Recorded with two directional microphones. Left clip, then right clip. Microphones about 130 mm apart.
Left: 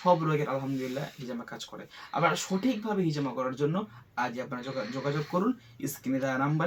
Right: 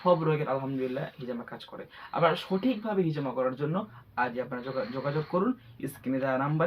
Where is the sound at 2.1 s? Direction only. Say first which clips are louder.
Right 1 dB; centre (ahead or behind).